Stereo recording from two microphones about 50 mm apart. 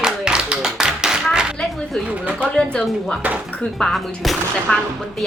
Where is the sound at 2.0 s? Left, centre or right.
Right.